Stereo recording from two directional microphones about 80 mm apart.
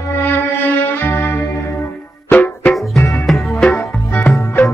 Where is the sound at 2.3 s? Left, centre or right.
Centre.